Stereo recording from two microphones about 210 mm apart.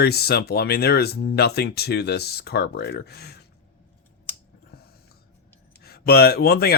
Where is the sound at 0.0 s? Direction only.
50° left (ahead or behind).